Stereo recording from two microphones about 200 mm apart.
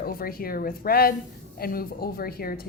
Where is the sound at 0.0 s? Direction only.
50° left (ahead or behind).